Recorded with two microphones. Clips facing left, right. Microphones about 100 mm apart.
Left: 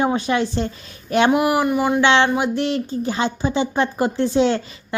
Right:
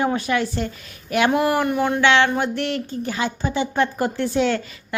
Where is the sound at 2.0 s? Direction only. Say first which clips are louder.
Even; 20° left (ahead or behind).